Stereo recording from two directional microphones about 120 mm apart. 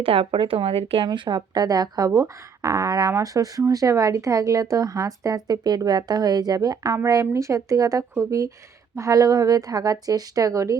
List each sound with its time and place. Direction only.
0.0 s speech: 50° right (ahead or behind)
1.0 s speech: 40° right (ahead or behind)